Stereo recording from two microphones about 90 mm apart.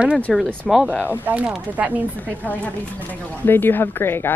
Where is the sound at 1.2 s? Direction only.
20° right (ahead or behind).